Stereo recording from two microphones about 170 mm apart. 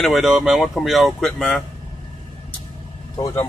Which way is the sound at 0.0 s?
Centre (ahead or behind).